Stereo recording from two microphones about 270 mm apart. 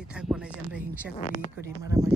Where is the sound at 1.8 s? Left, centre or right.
Centre.